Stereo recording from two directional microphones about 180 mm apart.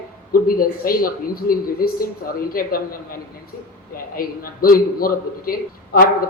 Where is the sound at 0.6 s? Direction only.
55° left (ahead or behind).